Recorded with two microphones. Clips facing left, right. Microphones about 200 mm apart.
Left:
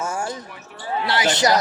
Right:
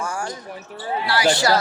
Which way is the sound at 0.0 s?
25° left (ahead or behind).